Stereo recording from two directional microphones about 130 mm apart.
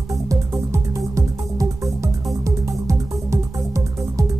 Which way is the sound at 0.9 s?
25° right (ahead or behind).